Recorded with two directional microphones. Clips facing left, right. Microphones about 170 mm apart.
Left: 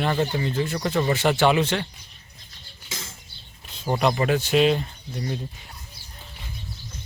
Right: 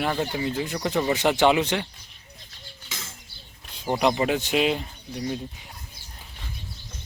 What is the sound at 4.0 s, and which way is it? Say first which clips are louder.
Speech: left 1 dB; 15° right (ahead or behind).